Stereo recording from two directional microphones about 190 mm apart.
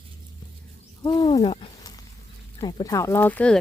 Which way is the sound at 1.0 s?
25° left (ahead or behind).